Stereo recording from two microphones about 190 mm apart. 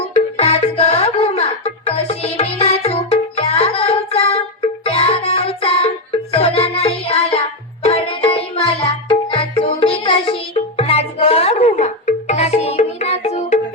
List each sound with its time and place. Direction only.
0.1 s music: 35° left (ahead or behind)